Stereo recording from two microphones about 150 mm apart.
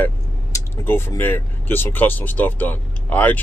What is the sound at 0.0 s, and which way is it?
Speech, 15° left (ahead or behind).